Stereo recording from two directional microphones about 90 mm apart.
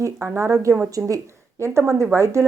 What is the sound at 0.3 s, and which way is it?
Speech, 35° right (ahead or behind).